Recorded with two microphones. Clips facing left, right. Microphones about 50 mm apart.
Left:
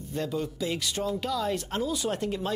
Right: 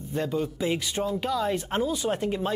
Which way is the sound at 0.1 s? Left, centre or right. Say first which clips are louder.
Right 3 dB; centre.